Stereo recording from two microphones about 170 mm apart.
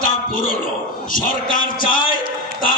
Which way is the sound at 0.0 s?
55° left (ahead or behind).